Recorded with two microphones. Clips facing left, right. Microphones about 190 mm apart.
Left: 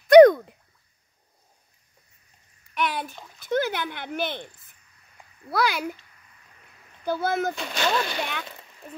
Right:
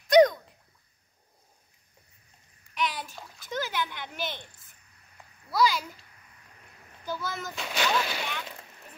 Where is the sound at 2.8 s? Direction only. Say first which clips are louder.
Left 4 dB; 60° left (ahead or behind).